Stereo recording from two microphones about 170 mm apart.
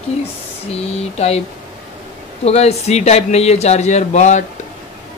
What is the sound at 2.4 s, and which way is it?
Speech, 40° left (ahead or behind).